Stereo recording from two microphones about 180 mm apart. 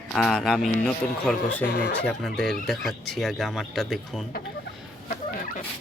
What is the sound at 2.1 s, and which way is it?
Speech, centre (ahead or behind).